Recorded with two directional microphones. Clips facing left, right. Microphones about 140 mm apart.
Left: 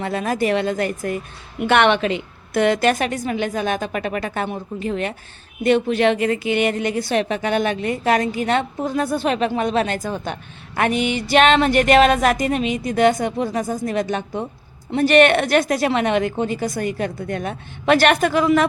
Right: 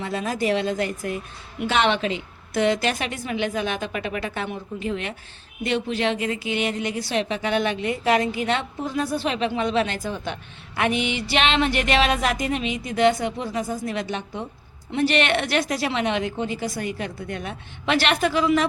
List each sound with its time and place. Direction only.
0.0 s a woman's voice: 60° left (ahead or behind)
1.6 s a woman's voice: 65° left (ahead or behind); by 5.1 s 45° left (ahead or behind)
5.6 s a woman's voice: 55° left (ahead or behind)